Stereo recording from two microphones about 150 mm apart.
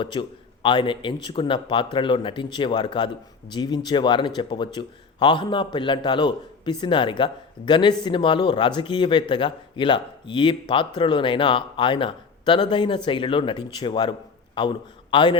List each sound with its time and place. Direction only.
0.0 s a man's voice: 30° left (ahead or behind)